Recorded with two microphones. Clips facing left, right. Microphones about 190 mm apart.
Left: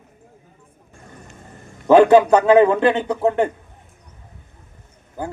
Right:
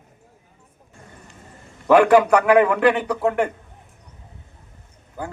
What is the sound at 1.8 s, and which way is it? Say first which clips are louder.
A man's voice: left 3 dB; 25° left (ahead or behind).